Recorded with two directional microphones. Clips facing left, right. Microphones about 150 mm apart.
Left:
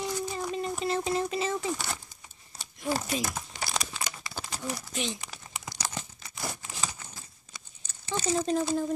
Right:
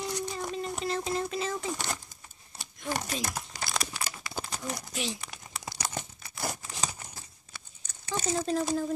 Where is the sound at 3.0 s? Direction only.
5° left (ahead or behind).